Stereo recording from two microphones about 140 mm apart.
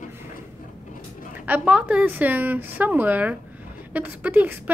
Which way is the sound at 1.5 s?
10° right (ahead or behind).